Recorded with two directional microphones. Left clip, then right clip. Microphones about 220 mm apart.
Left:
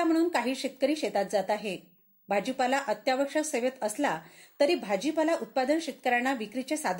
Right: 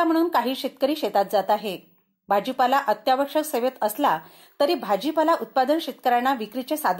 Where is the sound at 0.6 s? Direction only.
55° right (ahead or behind).